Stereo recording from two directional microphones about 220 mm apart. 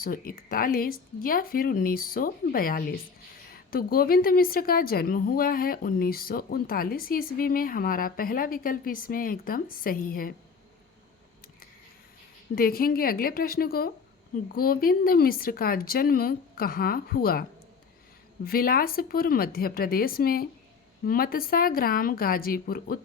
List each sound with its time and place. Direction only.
0.0 s a woman's voice: 40° left (ahead or behind)
12.5 s a woman's voice: 40° left (ahead or behind)
18.4 s a woman's voice: 40° left (ahead or behind)